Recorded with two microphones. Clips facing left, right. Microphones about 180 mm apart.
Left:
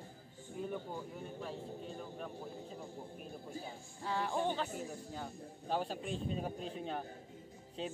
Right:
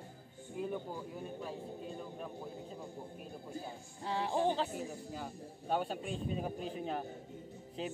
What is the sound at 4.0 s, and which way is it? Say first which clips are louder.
Speech: right 1 dB; 25° right (ahead or behind).